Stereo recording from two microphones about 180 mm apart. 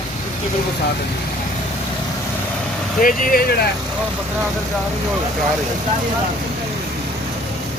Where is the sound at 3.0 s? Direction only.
55° left (ahead or behind).